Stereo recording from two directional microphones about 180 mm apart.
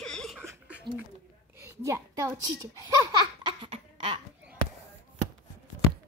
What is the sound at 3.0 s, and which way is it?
Laughter, 25° right (ahead or behind).